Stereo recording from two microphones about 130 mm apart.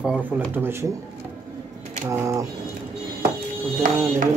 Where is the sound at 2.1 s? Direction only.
25° right (ahead or behind).